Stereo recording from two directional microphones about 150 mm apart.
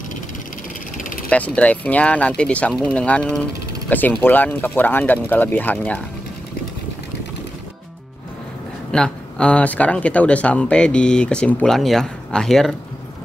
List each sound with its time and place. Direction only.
0.9 s vehicle: 65° left (ahead or behind)
1.3 s speech: 10° left (ahead or behind)
8.9 s speech: 5° left (ahead or behind)